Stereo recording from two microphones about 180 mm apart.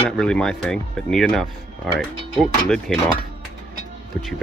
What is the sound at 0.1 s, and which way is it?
Speech, 5° left (ahead or behind).